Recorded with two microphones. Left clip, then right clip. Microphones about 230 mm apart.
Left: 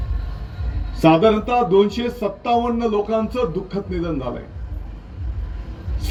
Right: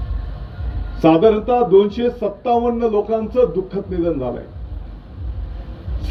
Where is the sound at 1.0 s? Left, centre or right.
Left.